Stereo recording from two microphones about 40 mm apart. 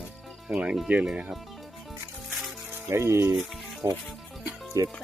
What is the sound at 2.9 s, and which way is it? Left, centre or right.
Speech, right.